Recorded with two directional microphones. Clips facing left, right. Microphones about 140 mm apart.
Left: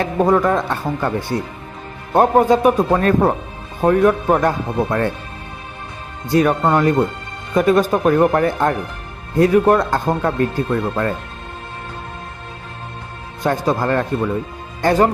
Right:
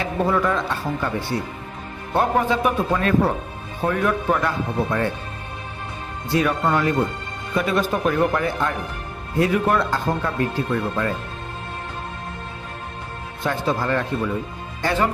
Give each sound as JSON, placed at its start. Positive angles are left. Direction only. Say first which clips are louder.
{"t": 0.0, "sound": "speech", "louder": "left 6 dB", "side_deg": 45}
{"t": 6.3, "sound": "speech", "louder": "left 5 dB", "side_deg": 45}
{"t": 13.4, "sound": "speech", "louder": "left 5 dB", "side_deg": 45}